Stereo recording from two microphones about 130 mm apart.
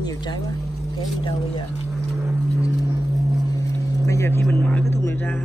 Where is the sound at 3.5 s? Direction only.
25° left (ahead or behind).